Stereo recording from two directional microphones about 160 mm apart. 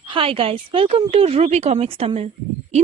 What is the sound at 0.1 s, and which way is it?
Speech, 35° right (ahead or behind).